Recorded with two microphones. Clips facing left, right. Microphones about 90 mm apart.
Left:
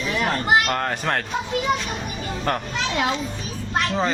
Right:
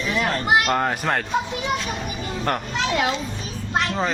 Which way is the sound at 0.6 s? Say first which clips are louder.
Right 2 dB; 5° right (ahead or behind).